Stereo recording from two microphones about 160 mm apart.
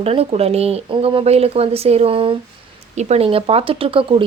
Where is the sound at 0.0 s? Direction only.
40° right (ahead or behind).